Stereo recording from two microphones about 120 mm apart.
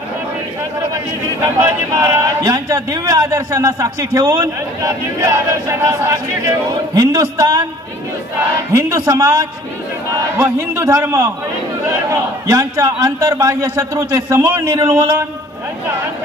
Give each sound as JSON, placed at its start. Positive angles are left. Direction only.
{"t": 0.9, "sound": "a man's voice", "side_deg": -25}
{"t": 8.7, "sound": "a man's voice", "side_deg": -25}
{"t": 10.3, "sound": "a man's voice", "side_deg": -20}